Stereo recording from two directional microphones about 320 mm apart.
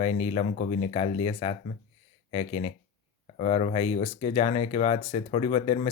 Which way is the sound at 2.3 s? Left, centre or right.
Centre.